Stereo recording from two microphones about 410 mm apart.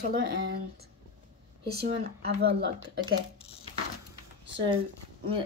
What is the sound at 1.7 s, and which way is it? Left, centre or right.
Speech, right.